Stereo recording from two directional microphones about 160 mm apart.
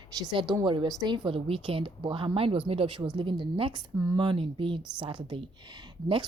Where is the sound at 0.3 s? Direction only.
30° right (ahead or behind).